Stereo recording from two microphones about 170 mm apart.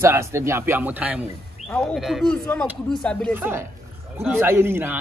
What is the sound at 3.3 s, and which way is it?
A man's voice, 15° right (ahead or behind).